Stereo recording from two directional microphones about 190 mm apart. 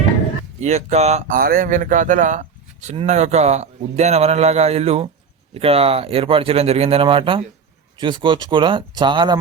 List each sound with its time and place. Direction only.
0.6 s speech: 35° right (ahead or behind)